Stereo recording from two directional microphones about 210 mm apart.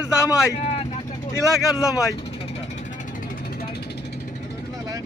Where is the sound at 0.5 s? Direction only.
30° left (ahead or behind).